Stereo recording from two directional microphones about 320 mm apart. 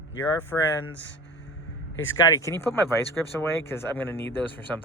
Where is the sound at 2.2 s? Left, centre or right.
Centre.